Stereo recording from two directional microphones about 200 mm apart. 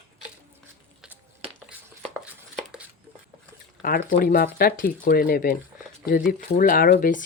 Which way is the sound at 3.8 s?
45° left (ahead or behind).